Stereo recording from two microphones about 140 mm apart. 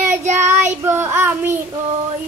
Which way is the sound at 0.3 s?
15° right (ahead or behind).